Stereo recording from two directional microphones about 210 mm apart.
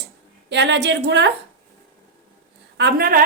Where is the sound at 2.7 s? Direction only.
50° right (ahead or behind).